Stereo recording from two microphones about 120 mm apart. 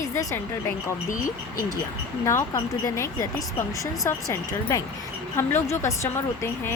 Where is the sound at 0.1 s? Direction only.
25° left (ahead or behind).